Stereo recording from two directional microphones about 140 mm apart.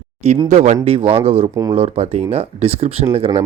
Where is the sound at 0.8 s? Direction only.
45° right (ahead or behind).